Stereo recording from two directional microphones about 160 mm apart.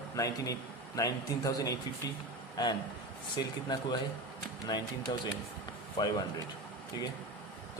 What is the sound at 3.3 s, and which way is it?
A man's voice, 25° left (ahead or behind).